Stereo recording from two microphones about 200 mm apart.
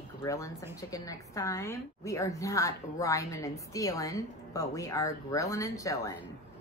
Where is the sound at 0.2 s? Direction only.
15° left (ahead or behind).